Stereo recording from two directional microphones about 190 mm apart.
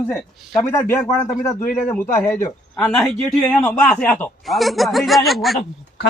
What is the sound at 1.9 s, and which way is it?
A man's voice, 10° left (ahead or behind).